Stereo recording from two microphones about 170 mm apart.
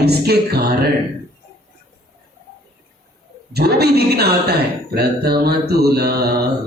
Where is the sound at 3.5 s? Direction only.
70° right (ahead or behind).